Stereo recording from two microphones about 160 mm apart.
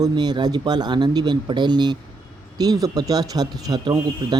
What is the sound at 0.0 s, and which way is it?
Speech, 25° right (ahead or behind).